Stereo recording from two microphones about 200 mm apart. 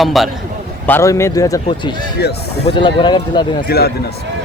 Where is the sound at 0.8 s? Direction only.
15° left (ahead or behind).